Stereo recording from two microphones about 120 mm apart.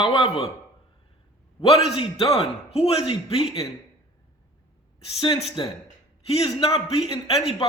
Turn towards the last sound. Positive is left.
turn(degrees=55)  # may be behind; listen again after turning